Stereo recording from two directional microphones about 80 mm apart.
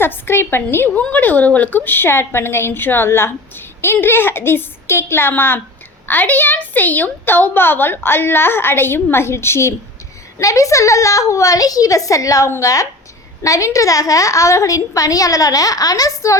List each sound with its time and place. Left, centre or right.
0.0 s a woman's voice: left
0.9 s a woman's voice: centre; by 16.4 s left